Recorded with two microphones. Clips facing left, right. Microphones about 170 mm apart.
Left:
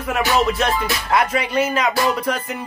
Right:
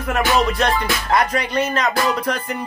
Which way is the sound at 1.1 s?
5° left (ahead or behind).